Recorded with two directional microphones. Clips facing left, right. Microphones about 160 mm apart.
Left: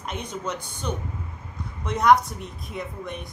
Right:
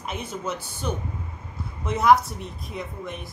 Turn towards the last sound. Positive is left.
turn(degrees=0)  # may be behind; listen again after turning